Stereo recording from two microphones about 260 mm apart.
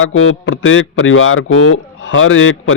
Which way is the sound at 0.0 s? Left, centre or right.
Left.